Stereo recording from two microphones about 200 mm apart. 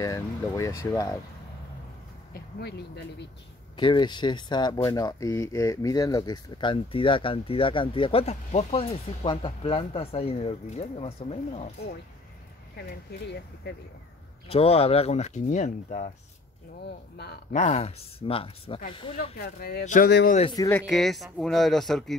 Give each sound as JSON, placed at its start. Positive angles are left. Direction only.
{"t": 0.0, "sound": "speech", "side_deg": 15}
{"t": 2.3, "sound": "speech", "side_deg": 55}
{"t": 3.7, "sound": "speech", "side_deg": 25}
{"t": 13.1, "sound": "speech", "side_deg": 55}
{"t": 14.5, "sound": "speech", "side_deg": 30}
{"t": 16.8, "sound": "speech", "side_deg": 55}
{"t": 17.5, "sound": "speech", "side_deg": 35}
{"t": 19.4, "sound": "speech", "side_deg": 50}
{"t": 19.8, "sound": "speech", "side_deg": 40}
{"t": 20.1, "sound": "speech", "side_deg": 55}
{"t": 20.5, "sound": "speech", "side_deg": 15}
{"t": 20.8, "sound": "speech", "side_deg": 0}